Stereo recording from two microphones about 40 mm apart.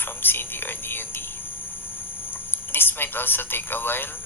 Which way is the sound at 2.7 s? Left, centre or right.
Left.